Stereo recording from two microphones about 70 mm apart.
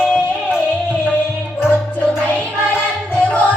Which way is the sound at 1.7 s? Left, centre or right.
Left.